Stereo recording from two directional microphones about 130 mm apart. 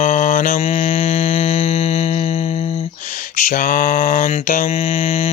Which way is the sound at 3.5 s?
90° left.